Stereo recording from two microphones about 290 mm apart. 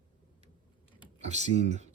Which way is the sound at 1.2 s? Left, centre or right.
Right.